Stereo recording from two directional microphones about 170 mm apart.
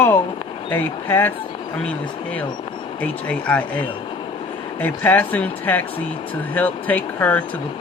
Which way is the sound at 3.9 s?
30° left (ahead or behind).